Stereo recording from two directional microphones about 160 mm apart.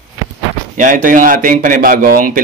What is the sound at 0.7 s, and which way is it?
A man's voice, 50° right (ahead or behind).